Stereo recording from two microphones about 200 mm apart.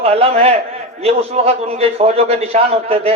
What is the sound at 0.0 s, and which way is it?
A man's voice, 30° right (ahead or behind).